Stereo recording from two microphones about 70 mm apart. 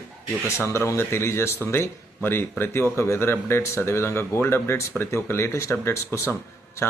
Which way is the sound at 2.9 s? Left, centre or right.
Left.